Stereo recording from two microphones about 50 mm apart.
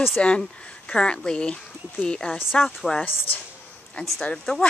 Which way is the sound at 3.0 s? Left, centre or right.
Left.